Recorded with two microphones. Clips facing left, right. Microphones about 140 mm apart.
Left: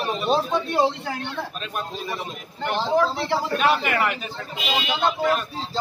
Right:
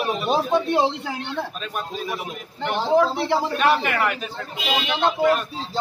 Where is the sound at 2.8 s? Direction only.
15° right (ahead or behind).